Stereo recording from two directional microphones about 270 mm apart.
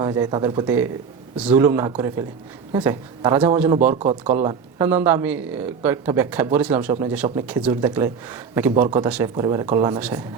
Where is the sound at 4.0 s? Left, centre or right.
Right.